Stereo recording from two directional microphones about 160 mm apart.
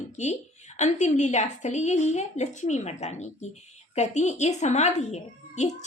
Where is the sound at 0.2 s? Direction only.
45° left (ahead or behind).